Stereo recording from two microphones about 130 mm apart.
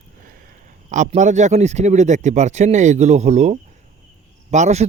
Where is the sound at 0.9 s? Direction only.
70° right (ahead or behind).